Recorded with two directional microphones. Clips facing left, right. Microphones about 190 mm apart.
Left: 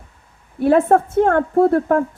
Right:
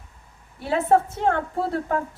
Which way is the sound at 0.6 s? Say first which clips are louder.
Left 6 dB; 50° left (ahead or behind).